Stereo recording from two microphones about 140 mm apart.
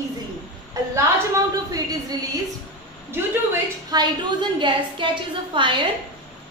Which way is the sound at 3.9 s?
30° right (ahead or behind).